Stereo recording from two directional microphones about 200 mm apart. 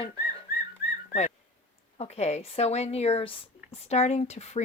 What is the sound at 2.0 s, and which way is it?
Speech, 35° left (ahead or behind).